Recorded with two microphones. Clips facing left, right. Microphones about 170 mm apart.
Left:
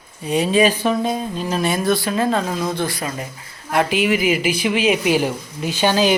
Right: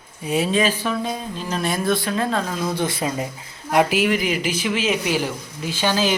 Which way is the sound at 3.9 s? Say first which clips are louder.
Left 2 dB; 5° left (ahead or behind).